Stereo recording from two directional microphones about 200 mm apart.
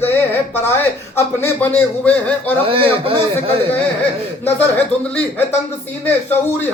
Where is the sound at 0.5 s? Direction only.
10° left (ahead or behind).